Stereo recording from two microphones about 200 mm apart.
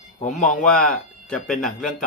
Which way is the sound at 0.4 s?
5° left (ahead or behind).